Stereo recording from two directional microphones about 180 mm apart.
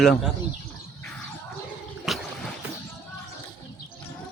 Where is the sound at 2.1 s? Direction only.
Centre (ahead or behind).